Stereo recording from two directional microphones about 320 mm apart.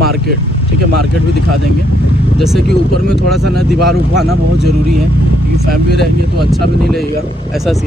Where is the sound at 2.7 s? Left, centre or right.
Left.